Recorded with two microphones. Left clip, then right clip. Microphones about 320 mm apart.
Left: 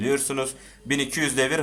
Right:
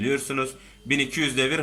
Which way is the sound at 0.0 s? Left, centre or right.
Centre.